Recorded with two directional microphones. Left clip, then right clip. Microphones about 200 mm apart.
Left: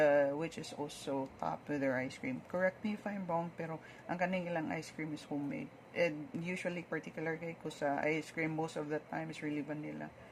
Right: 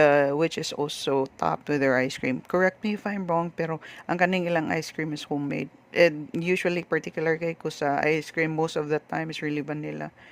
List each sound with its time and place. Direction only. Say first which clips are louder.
0.0 s speech: right 10 dB; 55° right (ahead or behind)